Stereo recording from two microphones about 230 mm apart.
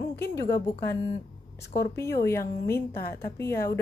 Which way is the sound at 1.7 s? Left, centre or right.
Centre.